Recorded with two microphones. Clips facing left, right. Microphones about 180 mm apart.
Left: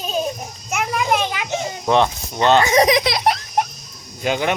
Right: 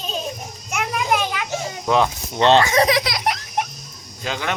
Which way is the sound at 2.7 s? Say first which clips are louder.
Left 3 dB; 20° left (ahead or behind).